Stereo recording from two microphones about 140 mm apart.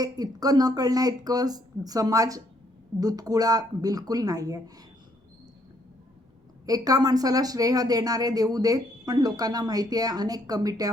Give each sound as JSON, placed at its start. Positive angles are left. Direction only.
{"t": 0.0, "sound": "speech", "side_deg": -25}
{"t": 6.7, "sound": "speech", "side_deg": -25}